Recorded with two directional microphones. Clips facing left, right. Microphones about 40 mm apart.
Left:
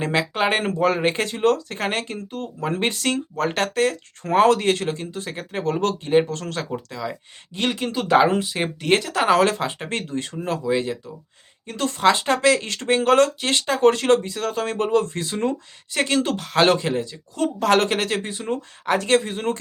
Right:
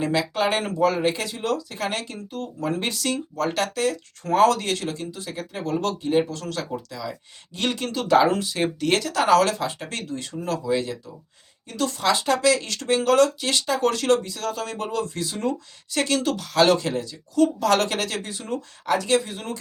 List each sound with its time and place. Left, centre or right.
0.0 s speech: left
7.6 s speech: centre; by 19.5 s left